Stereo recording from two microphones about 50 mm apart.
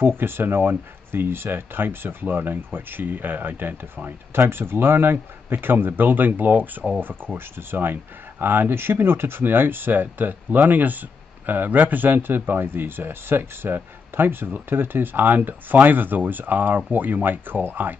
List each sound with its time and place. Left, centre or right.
0.2 s speech: right